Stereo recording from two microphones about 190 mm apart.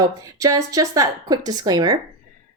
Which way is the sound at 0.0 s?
15° right (ahead or behind).